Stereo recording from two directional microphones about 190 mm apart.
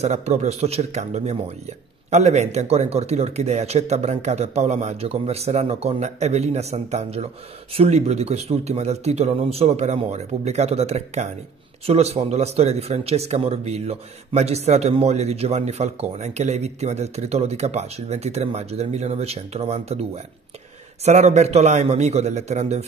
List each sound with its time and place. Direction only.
0.0 s a man's voice: 35° right (ahead or behind)